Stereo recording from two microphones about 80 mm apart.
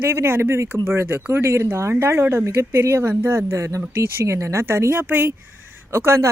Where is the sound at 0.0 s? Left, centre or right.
Right.